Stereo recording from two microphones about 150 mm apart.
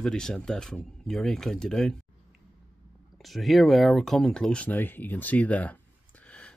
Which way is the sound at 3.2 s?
Centre (ahead or behind).